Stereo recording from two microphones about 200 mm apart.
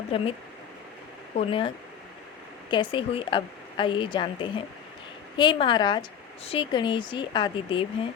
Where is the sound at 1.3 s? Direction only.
25° left (ahead or behind).